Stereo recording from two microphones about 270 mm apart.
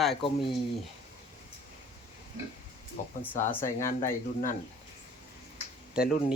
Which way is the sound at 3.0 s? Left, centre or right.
Left.